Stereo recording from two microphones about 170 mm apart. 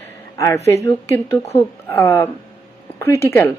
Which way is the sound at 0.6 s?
15° left (ahead or behind).